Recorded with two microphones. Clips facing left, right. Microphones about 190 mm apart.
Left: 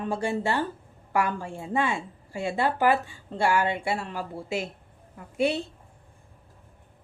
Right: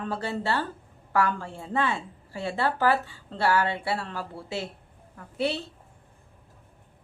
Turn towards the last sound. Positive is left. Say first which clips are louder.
# left 3 dB
turn(degrees=15)  # may be behind; listen again after turning